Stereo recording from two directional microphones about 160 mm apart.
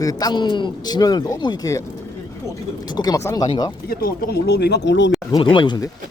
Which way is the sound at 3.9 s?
80° left.